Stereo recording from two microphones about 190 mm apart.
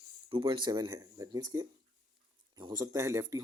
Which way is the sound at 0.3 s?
25° right (ahead or behind).